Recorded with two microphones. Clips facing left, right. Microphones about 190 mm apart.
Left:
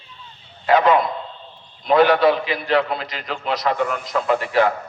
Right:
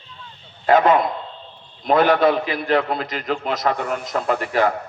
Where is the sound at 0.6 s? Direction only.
45° right (ahead or behind).